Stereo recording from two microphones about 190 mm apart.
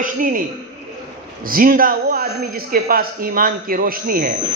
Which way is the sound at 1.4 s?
50° right (ahead or behind).